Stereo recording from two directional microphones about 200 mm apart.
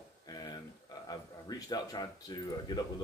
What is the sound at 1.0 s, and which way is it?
Speech, 20° left (ahead or behind).